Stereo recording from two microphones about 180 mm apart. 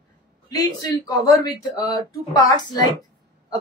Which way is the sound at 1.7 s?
20° left (ahead or behind).